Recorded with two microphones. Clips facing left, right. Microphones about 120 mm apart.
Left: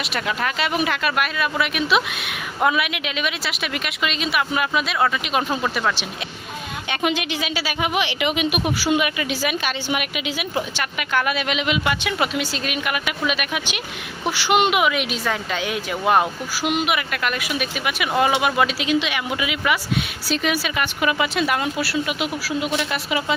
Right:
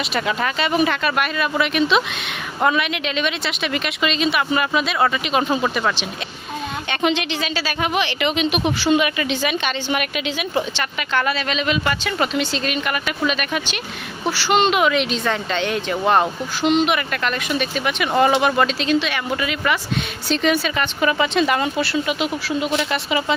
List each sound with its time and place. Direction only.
0.1 s a woman's voice: centre (ahead or behind)